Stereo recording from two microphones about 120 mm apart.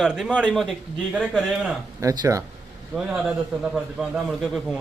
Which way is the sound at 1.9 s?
25° right (ahead or behind).